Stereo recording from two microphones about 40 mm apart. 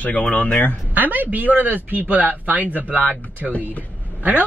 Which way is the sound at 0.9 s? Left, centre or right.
Right.